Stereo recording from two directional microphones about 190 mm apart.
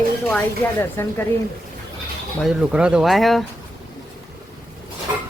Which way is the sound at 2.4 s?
Centre (ahead or behind).